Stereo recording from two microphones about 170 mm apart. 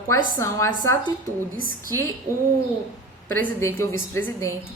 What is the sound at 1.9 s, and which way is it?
Speech, 15° left (ahead or behind).